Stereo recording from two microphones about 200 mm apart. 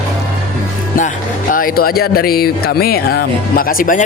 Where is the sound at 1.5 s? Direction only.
45° left (ahead or behind).